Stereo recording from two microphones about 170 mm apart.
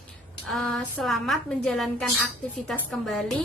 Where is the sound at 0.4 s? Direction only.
Centre (ahead or behind).